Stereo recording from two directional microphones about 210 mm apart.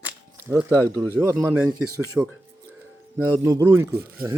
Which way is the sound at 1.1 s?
10° right (ahead or behind).